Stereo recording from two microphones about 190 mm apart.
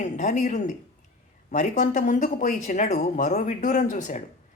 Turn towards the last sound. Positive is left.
turn(degrees=40)  # may be behind; listen again after turning